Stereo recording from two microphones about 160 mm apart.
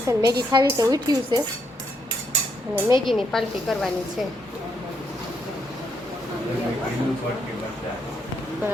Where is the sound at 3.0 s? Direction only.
Centre (ahead or behind).